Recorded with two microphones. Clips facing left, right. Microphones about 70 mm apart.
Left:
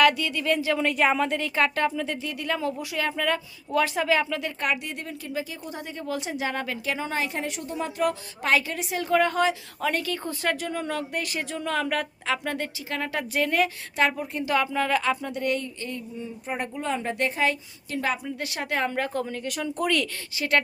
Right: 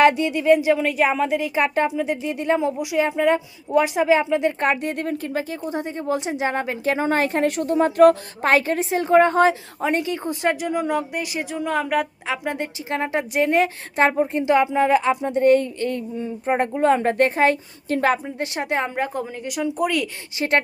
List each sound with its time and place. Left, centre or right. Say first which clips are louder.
0.0 s speech: right 5 dB; right
0.8 s speech: right 3 dB; centre; by 4.7 s right
4.7 s speech: right 7 dB; right
5.7 s a woman's voice: right 7 dB; right
9.8 s speech: right 5 dB; right
12.9 s a woman's voice: right 6 dB; right
18.3 s speech: right 5 dB; right; by 20.1 s centre
20.4 s speech: right 5 dB; right